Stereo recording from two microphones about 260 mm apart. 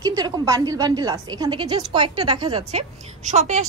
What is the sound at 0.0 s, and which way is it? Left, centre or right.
A woman's voice, centre.